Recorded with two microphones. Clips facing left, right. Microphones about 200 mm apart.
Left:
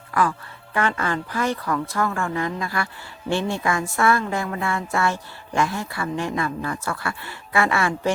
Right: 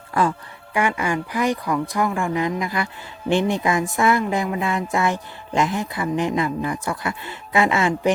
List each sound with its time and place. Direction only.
0.1 s speech: 25° right (ahead or behind)
0.7 s speech: 15° right (ahead or behind)